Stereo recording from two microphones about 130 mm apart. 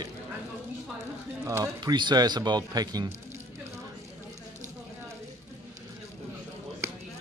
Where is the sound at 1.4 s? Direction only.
25° right (ahead or behind).